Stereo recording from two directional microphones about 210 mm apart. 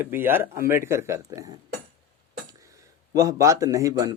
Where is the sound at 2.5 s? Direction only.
15° right (ahead or behind).